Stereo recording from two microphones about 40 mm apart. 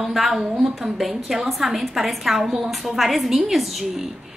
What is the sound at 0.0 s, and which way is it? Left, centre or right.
A woman's voice, centre.